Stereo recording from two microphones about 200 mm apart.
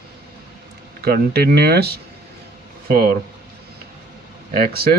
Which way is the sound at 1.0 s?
50° right (ahead or behind).